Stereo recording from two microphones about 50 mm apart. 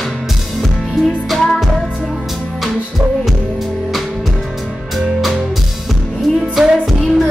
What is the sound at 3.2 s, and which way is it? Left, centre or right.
Music, centre.